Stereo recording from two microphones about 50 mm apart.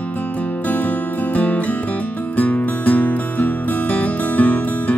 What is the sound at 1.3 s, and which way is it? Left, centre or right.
Music, left.